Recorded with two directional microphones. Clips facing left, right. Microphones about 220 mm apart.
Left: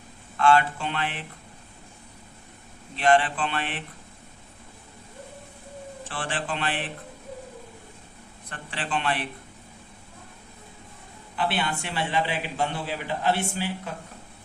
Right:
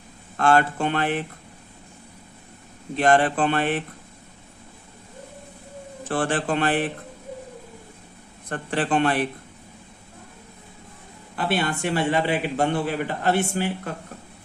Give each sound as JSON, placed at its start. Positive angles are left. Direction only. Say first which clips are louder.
{"t": 0.3, "sound": "a man's voice", "louder": "right 2 dB", "side_deg": -45}
{"t": 2.9, "sound": "a man's voice", "louder": "right 3 dB", "side_deg": -45}
{"t": 6.1, "sound": "a man's voice", "louder": "right 9 dB", "side_deg": -45}
{"t": 8.4, "sound": "a man's voice", "louder": "right 9 dB", "side_deg": -45}
{"t": 11.3, "sound": "a man's voice", "louder": "right 3 dB", "side_deg": -45}